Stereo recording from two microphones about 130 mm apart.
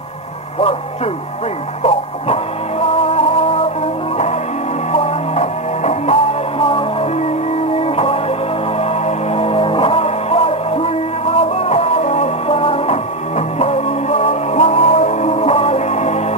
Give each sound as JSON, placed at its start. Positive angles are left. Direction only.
{"t": 1.8, "sound": "a sound", "side_deg": 50}
{"t": 4.9, "sound": "music", "side_deg": 55}
{"t": 6.6, "sound": "music", "side_deg": 45}